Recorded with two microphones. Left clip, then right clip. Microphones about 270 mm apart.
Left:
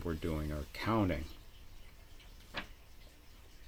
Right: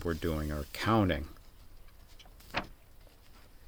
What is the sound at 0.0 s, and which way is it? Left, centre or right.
Speech, right.